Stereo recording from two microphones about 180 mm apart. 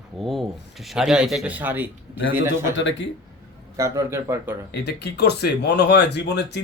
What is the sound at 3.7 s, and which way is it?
Speech, 15° right (ahead or behind).